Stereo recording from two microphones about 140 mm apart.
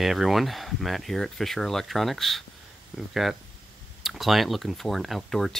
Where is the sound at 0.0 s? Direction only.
Centre (ahead or behind).